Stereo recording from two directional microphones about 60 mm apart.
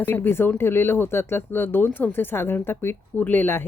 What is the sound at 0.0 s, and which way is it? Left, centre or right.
Speech, left.